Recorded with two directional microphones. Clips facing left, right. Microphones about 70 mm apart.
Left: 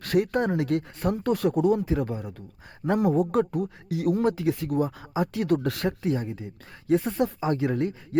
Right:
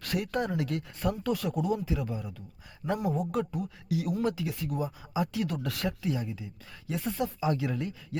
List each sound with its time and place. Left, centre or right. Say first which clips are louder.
0.0 s speech: left 7 dB; left
2.8 s speech: left 6 dB; left
3.3 s speech: left 7 dB; left